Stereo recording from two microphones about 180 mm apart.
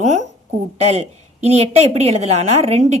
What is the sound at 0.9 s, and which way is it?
A woman's voice, 35° right (ahead or behind).